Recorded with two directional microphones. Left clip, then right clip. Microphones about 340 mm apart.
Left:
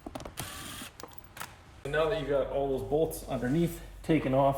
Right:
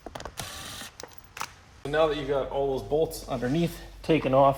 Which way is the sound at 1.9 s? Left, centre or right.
Centre.